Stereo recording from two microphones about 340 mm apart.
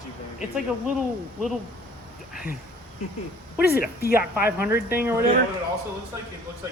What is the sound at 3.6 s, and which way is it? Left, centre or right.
Speech, left.